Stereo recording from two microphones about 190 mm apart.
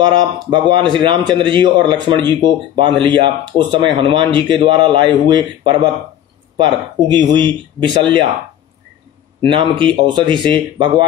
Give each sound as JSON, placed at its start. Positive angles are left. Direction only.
{"t": 0.0, "sound": "a man's voice", "side_deg": -25}
{"t": 9.5, "sound": "a man's voice", "side_deg": -25}